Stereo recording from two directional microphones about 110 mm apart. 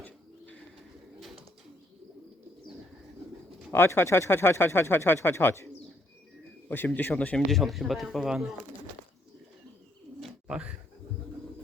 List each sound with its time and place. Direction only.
0.0 s bird: 15° left (ahead or behind)
3.7 s speech: 20° left (ahead or behind)
6.7 s a man's voice: 15° left (ahead or behind); by 8.5 s centre (ahead or behind)
10.2 s bird: 5° right (ahead or behind)